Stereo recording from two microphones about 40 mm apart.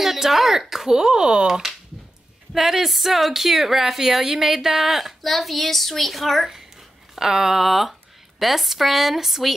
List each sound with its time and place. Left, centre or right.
0.0 s speech: centre; by 1.5 s right
1.5 s speech: centre
7.2 s speech: centre